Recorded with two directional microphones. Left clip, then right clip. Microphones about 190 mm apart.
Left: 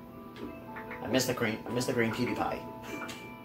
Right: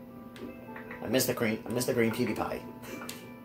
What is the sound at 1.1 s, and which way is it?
Speech, 50° right (ahead or behind).